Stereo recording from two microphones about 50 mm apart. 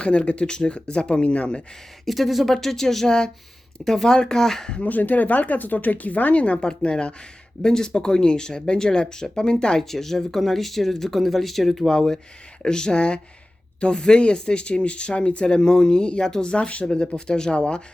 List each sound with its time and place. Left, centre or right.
0.0 s speech: left
2.0 s speech: centre
4.9 s speech: left; by 9.8 s centre
9.9 s speech: centre
11.9 s speech: centre